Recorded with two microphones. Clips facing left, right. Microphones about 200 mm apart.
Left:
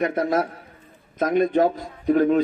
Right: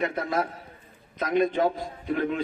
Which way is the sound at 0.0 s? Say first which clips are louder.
Left 5 dB; 45° left (ahead or behind).